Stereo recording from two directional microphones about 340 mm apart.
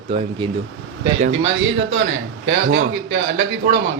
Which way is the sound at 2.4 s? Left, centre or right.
Right.